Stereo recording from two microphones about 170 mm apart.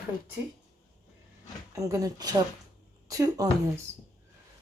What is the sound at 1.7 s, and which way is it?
A woman's voice, 20° right (ahead or behind).